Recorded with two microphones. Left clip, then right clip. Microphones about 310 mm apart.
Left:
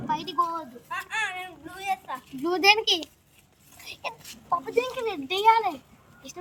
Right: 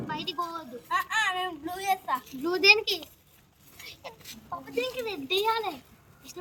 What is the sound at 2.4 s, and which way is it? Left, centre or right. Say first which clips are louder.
Speech: left 1 dB; left.